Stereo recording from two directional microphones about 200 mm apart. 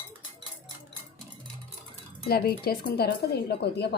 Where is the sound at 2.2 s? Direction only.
50° left (ahead or behind).